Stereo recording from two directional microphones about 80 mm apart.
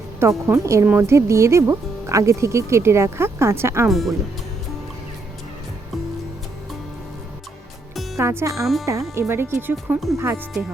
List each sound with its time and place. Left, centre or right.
0.2 s speech: right
3.8 s speech: centre
8.2 s speech: right
8.6 s speech: centre
8.9 s speech: right